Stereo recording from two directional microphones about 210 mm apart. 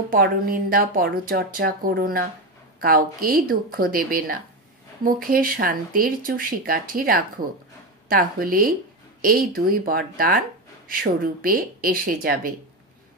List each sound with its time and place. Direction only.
0.1 s speech: 45° right (ahead or behind)